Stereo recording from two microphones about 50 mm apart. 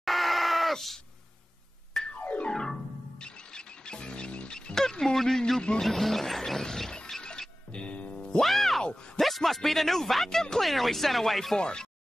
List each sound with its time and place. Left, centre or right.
0.0 s goat: centre
2.1 s music: left
2.5 s music: centre
5.8 s mechanisms: centre
7.1 s music: centre
8.4 s music: centre
8.8 s a sound: centre
9.2 s speech: centre
11.5 s speech: centre